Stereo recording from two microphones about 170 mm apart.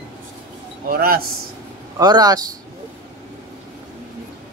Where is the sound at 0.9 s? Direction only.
60° right (ahead or behind).